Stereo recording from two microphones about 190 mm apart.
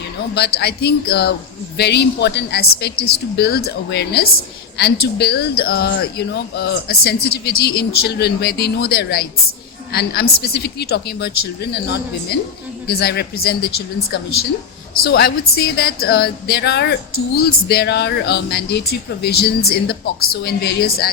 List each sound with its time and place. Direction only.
0.3 s speech: 60° left (ahead or behind)